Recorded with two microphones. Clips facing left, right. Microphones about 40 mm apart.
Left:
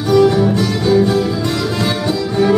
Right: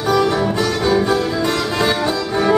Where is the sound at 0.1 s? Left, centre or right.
Centre.